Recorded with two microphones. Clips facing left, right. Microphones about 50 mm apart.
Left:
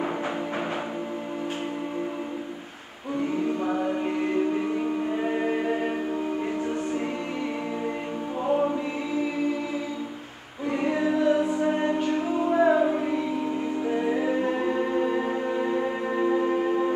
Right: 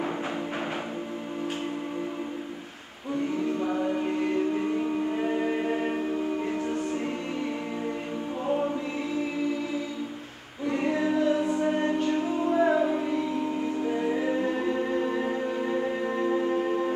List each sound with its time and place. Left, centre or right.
3.6 s music: centre
8.5 s choir: centre
10.9 s music: centre
11.4 s music: centre